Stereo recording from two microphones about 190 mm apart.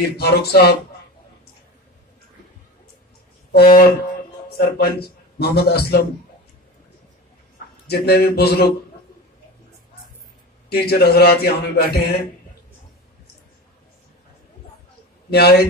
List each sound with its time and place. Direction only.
0.2 s a man's voice: 55° left (ahead or behind)
3.5 s a man's voice: 50° left (ahead or behind)
7.8 s a man's voice: 55° left (ahead or behind)
10.7 s a man's voice: 55° left (ahead or behind)
15.2 s a man's voice: 55° left (ahead or behind)